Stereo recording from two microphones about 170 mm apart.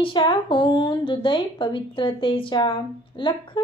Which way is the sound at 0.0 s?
30° left (ahead or behind).